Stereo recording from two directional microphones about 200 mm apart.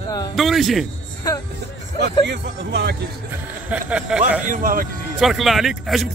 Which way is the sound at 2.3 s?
60° right (ahead or behind).